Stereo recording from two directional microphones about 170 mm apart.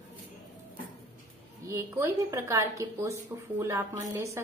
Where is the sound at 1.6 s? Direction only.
15° right (ahead or behind).